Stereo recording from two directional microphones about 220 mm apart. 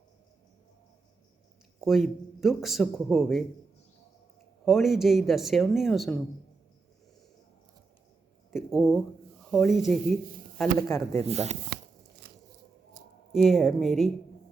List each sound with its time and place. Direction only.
1.8 s speech: centre (ahead or behind)
4.6 s speech: centre (ahead or behind)
8.4 s speech: centre (ahead or behind)
10.6 s speech: 10° left (ahead or behind)
11.2 s speech: 30° right (ahead or behind)
13.3 s speech: centre (ahead or behind)